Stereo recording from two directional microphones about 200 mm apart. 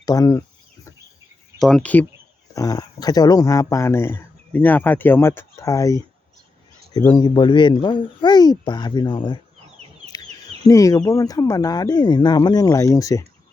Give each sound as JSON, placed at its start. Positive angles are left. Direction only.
{"t": 0.0, "sound": "speech", "side_deg": 20}
{"t": 1.5, "sound": "speech", "side_deg": 0}
{"t": 2.6, "sound": "speech", "side_deg": 20}
{"t": 10.1, "sound": "a sound", "side_deg": 20}
{"t": 10.7, "sound": "speech", "side_deg": 15}